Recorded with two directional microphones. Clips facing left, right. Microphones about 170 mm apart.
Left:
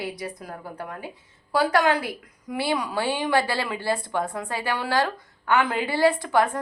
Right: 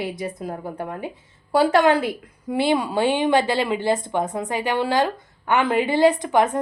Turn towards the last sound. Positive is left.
turn(degrees=-20)  # may be behind; listen again after turning